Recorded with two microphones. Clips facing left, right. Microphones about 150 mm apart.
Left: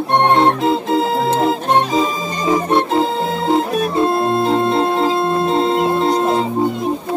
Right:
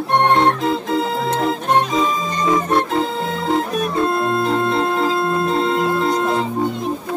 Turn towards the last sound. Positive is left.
turn(degrees=30)  # may be behind; listen again after turning